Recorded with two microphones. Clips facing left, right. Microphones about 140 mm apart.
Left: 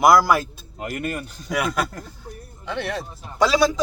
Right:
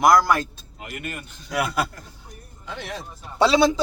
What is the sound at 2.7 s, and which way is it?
Speech, 70° left (ahead or behind).